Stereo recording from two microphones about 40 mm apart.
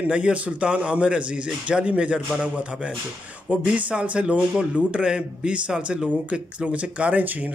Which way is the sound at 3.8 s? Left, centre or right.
Right.